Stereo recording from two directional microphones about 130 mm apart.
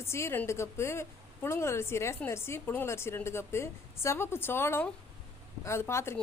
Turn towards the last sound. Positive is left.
turn(degrees=20)  # may be behind; listen again after turning